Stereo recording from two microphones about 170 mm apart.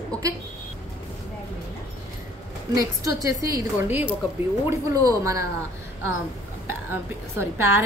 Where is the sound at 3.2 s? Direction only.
20° right (ahead or behind).